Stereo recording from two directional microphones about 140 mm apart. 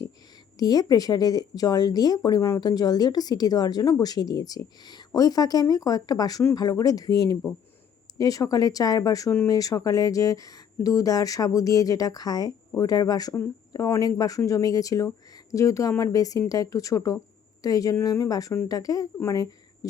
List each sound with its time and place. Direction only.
0.6 s speech: 25° left (ahead or behind)